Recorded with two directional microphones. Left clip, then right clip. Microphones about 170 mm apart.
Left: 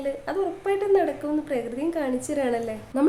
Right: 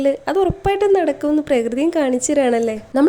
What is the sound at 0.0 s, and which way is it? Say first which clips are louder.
A woman's voice: right 10 dB; 50° right (ahead or behind).